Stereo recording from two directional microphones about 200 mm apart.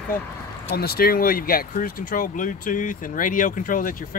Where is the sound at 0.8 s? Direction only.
50° left (ahead or behind).